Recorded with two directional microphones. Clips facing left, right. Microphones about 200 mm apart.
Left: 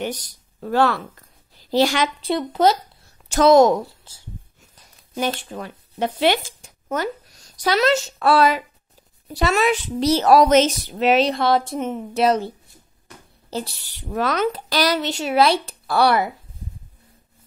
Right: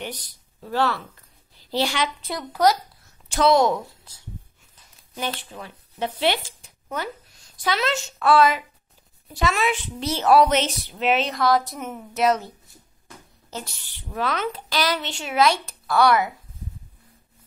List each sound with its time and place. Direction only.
0.0 s a woman's voice: 45° left (ahead or behind)
2.2 s speech: 25° left (ahead or behind)
3.3 s a woman's voice: 45° left (ahead or behind)
5.1 s a woman's voice: 45° left (ahead or behind)